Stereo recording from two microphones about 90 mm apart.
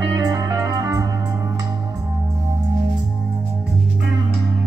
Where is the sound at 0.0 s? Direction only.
45° right (ahead or behind).